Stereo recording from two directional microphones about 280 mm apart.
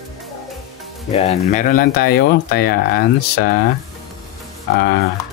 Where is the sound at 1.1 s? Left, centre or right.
Left.